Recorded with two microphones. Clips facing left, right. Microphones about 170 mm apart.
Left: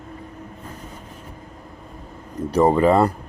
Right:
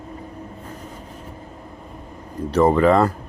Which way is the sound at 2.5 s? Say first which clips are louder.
Even; 15° left (ahead or behind).